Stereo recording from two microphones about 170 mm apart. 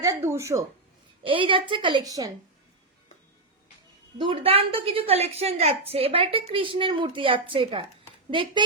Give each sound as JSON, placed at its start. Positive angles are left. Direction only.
{"t": 0.0, "sound": "speech", "side_deg": -15}
{"t": 1.2, "sound": "a woman's voice", "side_deg": -30}
{"t": 4.2, "sound": "a woman's voice", "side_deg": -30}